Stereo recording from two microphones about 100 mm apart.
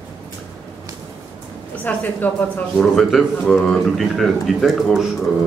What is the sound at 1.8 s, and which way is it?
Speech, 15° left (ahead or behind).